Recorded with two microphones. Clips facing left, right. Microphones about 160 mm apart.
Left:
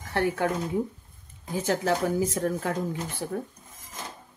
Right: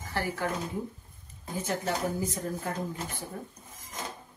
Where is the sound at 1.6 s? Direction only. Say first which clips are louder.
Left 5 dB; 85° left.